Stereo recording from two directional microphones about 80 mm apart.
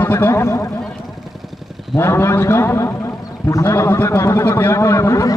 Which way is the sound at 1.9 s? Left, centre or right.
Left.